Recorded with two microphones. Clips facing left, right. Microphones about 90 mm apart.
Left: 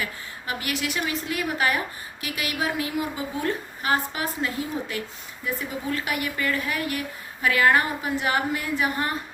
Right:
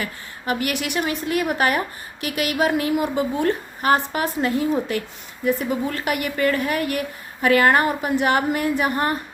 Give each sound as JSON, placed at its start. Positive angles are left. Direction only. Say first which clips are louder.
{"t": 0.0, "sound": "a woman's voice", "louder": "right 3 dB", "side_deg": -55}
{"t": 0.9, "sound": "a woman's voice", "louder": "right 5 dB", "side_deg": -45}